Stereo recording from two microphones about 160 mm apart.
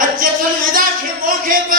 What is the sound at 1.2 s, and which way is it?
Speech, 60° right (ahead or behind).